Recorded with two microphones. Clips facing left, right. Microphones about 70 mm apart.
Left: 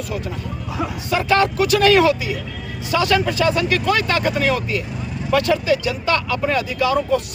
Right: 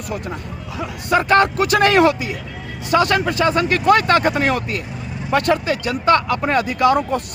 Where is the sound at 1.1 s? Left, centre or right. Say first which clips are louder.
Right 3 dB; right.